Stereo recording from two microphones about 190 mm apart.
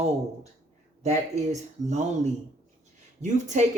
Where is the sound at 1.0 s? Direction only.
35° right (ahead or behind).